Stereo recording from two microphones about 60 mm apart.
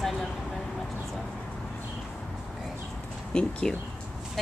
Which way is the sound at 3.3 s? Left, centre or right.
Centre.